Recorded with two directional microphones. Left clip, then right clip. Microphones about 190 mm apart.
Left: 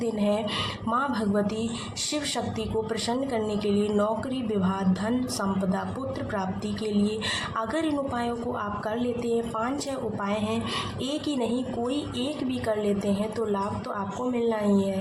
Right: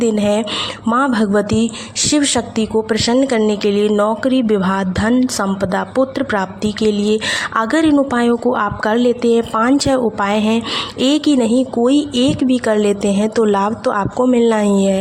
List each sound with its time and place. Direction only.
0.0 s a woman's voice: 50° right (ahead or behind)